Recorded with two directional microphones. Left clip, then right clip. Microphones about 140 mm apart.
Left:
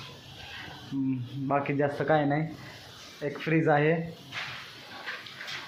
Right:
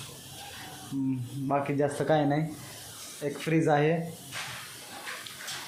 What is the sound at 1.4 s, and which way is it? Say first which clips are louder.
Speech: even; 15° right (ahead or behind).